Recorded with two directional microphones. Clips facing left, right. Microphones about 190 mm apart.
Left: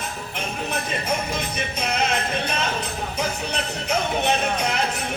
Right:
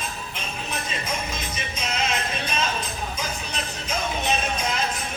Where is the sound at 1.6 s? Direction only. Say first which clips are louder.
Left 3 dB; 60° left (ahead or behind).